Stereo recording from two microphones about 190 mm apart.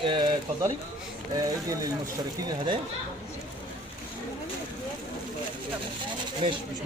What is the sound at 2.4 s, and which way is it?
Speech, 25° right (ahead or behind).